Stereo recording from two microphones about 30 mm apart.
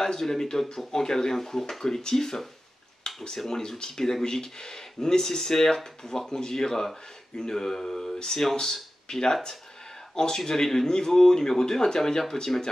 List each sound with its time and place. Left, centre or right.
0.0 s speech: centre
3.1 s a sound: left
3.4 s speech: centre